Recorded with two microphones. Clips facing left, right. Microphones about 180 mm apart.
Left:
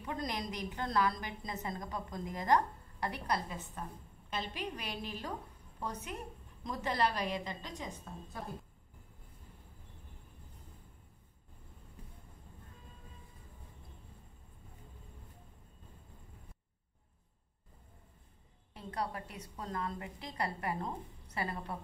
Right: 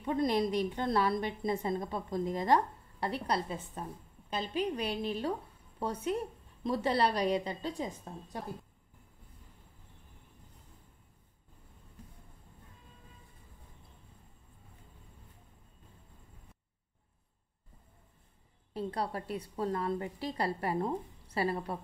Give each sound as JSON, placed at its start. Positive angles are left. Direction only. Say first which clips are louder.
{"t": 0.0, "sound": "a woman's voice", "louder": "right 9 dB", "side_deg": -25}
{"t": 18.7, "sound": "a woman's voice", "louder": "right 4 dB", "side_deg": -35}